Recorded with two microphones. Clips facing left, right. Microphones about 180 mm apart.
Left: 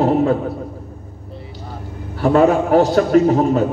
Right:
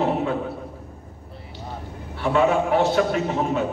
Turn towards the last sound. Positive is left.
turn(degrees=40)  # may be behind; listen again after turning